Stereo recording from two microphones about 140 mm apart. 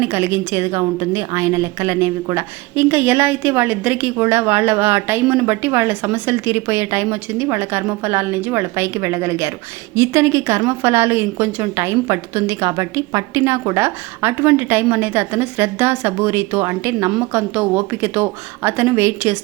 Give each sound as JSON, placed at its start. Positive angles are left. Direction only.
{"t": 0.0, "sound": "a woman's voice", "side_deg": -15}